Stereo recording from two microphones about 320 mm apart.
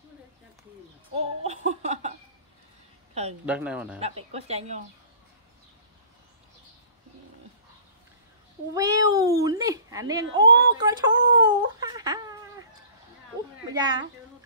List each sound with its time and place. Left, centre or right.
1.1 s a sound: centre
3.4 s speech: centre
4.3 s a woman's voice: centre
8.7 s speech: centre
10.7 s wail: centre
13.7 s speech: centre